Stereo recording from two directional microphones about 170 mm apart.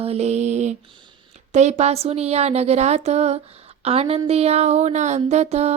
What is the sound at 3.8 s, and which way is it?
Speech, 35° right (ahead or behind).